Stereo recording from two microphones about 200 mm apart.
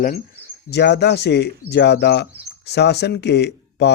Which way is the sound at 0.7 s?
55° left (ahead or behind).